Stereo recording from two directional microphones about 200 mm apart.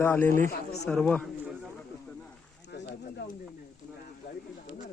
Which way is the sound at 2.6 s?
55° left (ahead or behind).